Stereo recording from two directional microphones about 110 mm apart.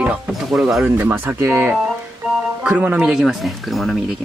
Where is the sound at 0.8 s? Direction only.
20° right (ahead or behind).